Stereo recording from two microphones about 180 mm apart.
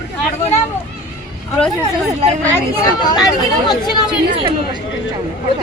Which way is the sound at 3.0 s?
20° left (ahead or behind).